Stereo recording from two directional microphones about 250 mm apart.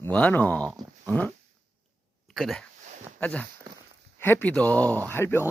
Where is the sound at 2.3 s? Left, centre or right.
Centre.